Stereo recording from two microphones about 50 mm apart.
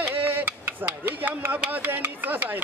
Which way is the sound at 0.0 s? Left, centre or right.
Right.